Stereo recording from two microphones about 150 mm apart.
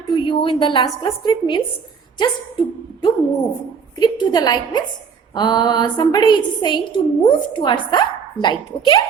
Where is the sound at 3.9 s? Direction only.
25° left (ahead or behind).